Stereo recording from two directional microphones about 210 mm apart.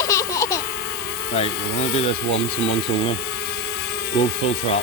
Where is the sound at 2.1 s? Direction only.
55° left (ahead or behind).